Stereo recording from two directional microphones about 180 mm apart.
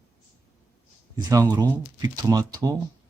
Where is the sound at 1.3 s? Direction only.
20° right (ahead or behind).